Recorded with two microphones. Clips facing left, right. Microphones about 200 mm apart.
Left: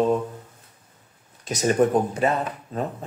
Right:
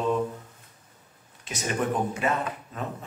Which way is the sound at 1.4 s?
40° left (ahead or behind).